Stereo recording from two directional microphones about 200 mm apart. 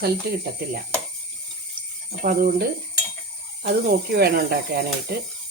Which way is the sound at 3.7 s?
50° right (ahead or behind).